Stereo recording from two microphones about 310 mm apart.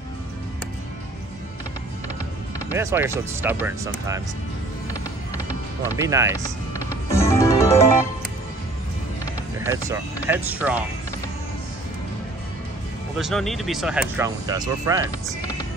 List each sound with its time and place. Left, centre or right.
2.7 s speech: centre
6.0 s speech: centre
6.3 s speech: centre
7.1 s music: centre
9.7 s speech: centre
13.2 s speech: centre